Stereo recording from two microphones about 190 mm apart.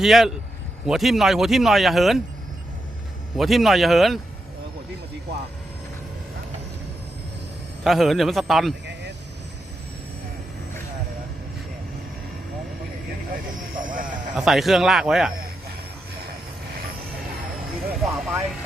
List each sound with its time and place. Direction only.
0.0 s speech: centre (ahead or behind)
3.3 s speech: centre (ahead or behind)
7.9 s speech: centre (ahead or behind)
13.3 s vehicle: 45° right (ahead or behind)
14.3 s speech: centre (ahead or behind)
18.0 s vehicle: centre (ahead or behind)